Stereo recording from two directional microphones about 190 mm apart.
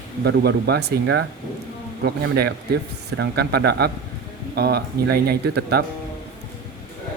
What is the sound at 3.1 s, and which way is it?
Speech, 60° right (ahead or behind).